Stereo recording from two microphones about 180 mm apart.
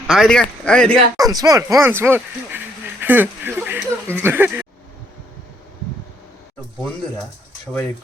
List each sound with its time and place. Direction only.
0.1 s speech: centre (ahead or behind)
1.1 s speech: 20° right (ahead or behind)
3.0 s a sound: 10° right (ahead or behind)